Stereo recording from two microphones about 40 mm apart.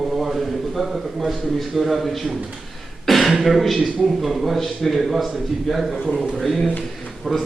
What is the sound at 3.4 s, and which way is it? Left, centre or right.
A man's voice, centre.